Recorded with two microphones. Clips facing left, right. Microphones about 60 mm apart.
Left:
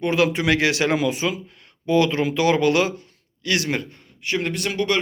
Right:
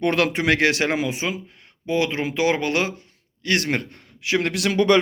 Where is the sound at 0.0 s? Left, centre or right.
Right.